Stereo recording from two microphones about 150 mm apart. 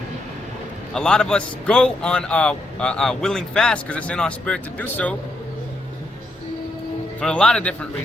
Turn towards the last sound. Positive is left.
turn(degrees=10)  # may be behind; listen again after turning